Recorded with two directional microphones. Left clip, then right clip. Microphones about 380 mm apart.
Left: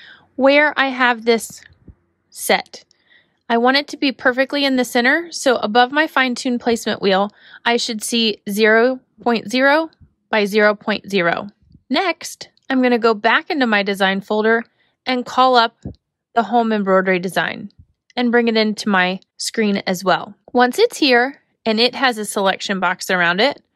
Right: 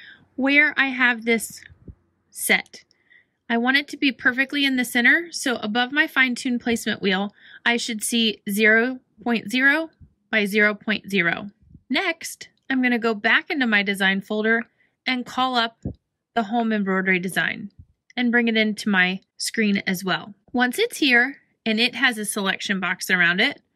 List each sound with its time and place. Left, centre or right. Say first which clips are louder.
0.0 s a woman's voice: left 10 dB; centre